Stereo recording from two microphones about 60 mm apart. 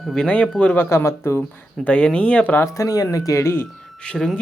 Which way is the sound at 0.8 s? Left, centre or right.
Left.